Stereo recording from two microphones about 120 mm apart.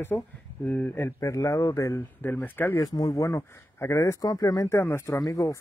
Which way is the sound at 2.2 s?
15° left (ahead or behind).